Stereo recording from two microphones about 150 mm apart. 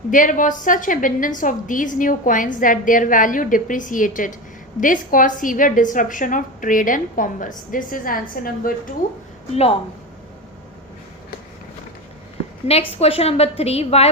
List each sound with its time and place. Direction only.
0.1 s a woman's voice: 60° left (ahead or behind)
12.6 s a woman's voice: 40° left (ahead or behind)